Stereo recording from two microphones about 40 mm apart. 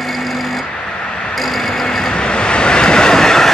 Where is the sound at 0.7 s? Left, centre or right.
Left.